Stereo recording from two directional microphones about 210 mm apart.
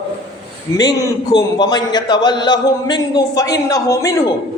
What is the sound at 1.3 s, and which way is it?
A man's voice, 20° left (ahead or behind).